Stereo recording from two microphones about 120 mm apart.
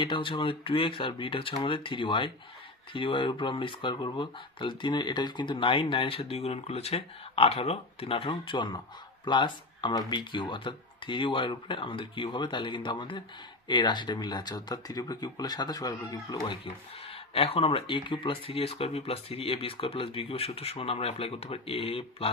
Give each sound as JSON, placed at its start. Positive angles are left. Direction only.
{"t": 0.0, "sound": "speech", "side_deg": 45}
{"t": 17.3, "sound": "speech", "side_deg": 55}